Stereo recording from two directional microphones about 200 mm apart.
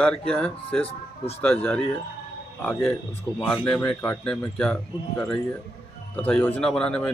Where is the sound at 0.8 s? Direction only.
30° left (ahead or behind).